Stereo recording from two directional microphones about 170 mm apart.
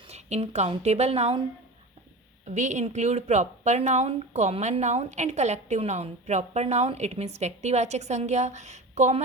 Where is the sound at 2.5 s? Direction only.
45° right (ahead or behind).